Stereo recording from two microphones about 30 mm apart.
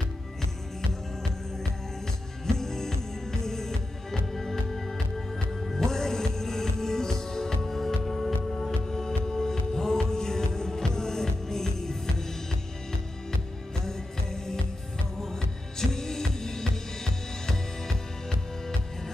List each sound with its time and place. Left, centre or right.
2.4 s music: centre
5.9 s music: centre
8.8 s music: centre
13.8 s music: centre
15.8 s music: centre